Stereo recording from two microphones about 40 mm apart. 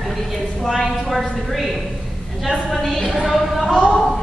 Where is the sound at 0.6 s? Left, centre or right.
Centre.